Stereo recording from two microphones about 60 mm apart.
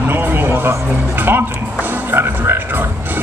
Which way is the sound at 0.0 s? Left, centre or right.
Right.